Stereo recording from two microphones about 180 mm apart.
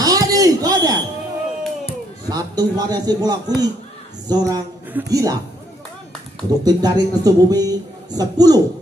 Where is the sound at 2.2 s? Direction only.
20° right (ahead or behind).